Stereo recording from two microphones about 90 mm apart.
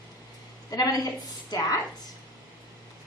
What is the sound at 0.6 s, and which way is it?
A woman's voice, 45° left (ahead or behind).